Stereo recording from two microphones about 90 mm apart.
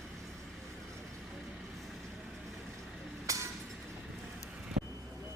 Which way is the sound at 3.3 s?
35° right (ahead or behind).